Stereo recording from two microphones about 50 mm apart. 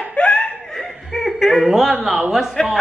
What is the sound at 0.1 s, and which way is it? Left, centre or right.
Laughter, centre.